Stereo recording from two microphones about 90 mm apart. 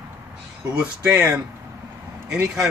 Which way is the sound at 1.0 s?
35° right (ahead or behind).